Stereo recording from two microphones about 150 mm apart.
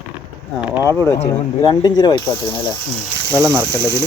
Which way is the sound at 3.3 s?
15° right (ahead or behind).